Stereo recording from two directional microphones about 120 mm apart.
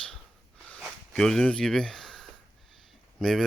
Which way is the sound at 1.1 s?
5° left (ahead or behind).